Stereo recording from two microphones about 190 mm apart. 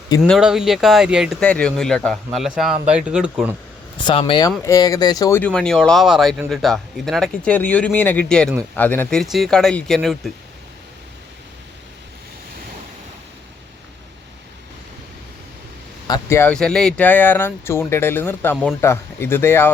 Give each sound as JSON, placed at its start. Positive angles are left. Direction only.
{"t": 0.2, "sound": "a man's voice", "side_deg": -5}
{"t": 3.9, "sound": "speech", "side_deg": 25}
{"t": 5.4, "sound": "a man's voice", "side_deg": 5}
{"t": 16.0, "sound": "speech", "side_deg": 15}